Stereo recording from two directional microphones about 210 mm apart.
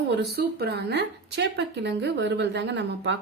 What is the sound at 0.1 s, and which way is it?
A woman's voice, 50° right (ahead or behind).